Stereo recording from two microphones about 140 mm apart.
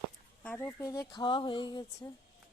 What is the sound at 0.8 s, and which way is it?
Speech, 25° left (ahead or behind).